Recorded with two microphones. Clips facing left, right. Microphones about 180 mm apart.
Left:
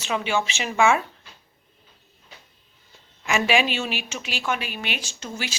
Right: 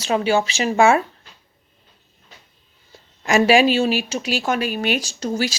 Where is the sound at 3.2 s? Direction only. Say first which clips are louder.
Right 7 dB; 40° right (ahead or behind).